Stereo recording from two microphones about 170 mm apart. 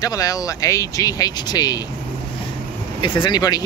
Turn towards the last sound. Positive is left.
turn(degrees=20)  # may be behind; listen again after turning